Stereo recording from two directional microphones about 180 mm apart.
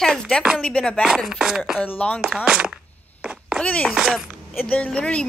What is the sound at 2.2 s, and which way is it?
Speech, 5° right (ahead or behind).